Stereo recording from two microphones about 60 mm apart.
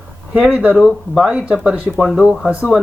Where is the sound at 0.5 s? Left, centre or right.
Right.